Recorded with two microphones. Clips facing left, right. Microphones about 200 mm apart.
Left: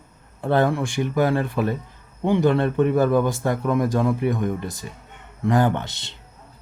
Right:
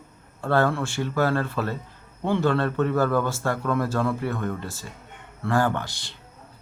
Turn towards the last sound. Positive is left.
turn(degrees=20)  # may be behind; listen again after turning